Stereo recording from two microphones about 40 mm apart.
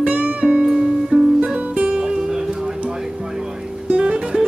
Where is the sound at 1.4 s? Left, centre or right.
Right.